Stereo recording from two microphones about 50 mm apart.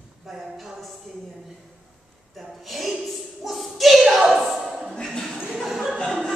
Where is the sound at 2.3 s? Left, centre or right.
Centre.